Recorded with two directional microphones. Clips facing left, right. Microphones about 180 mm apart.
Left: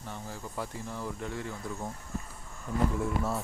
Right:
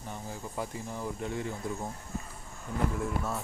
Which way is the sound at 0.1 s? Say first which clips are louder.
Right 1 dB; 15° right (ahead or behind).